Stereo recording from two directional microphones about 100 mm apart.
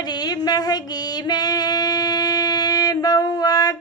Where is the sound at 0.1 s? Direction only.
40° left (ahead or behind).